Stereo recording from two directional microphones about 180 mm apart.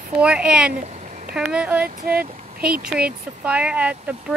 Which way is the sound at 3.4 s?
5° right (ahead or behind).